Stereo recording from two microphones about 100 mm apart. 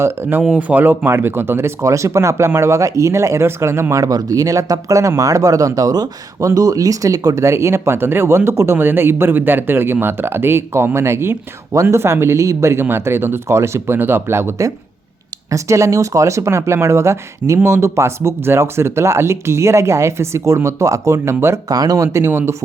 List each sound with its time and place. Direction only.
0.0 s speech: 20° right (ahead or behind)
21.7 s speech: 40° right (ahead or behind); by 22.5 s 25° right (ahead or behind)